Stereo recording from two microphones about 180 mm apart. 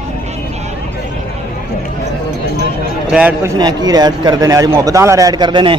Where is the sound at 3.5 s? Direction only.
20° right (ahead or behind).